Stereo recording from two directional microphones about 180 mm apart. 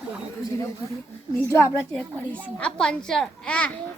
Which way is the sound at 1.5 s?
15° left (ahead or behind).